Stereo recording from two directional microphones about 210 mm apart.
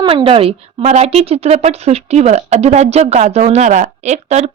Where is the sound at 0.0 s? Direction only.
25° right (ahead or behind).